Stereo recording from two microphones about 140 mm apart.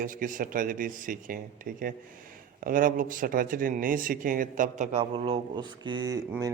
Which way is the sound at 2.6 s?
80° right.